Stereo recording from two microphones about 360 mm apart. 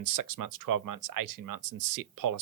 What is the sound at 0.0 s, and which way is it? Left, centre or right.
Speech, right.